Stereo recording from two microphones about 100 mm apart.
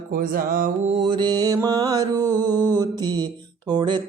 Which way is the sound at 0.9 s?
65° right (ahead or behind).